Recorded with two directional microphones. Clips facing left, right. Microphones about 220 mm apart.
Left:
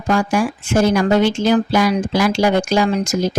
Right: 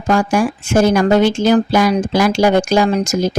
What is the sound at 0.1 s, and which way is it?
Speech, 45° right (ahead or behind).